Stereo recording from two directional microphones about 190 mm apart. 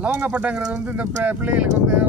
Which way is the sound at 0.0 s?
5° right (ahead or behind).